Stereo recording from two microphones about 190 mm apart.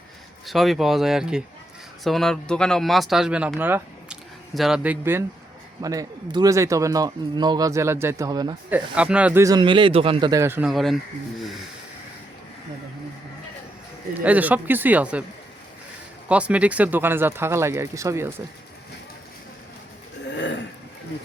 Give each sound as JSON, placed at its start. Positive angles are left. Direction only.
{"t": 0.4, "sound": "speech", "side_deg": 0}
{"t": 8.7, "sound": "speech", "side_deg": -5}
{"t": 10.7, "sound": "speech", "side_deg": 0}
{"t": 14.3, "sound": "speech", "side_deg": -10}
{"t": 16.3, "sound": "speech", "side_deg": -5}